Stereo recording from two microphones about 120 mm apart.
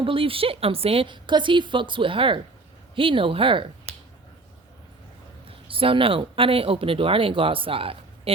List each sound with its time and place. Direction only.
0.0 s a woman's voice: 50° right (ahead or behind)
5.5 s speech: 50° right (ahead or behind)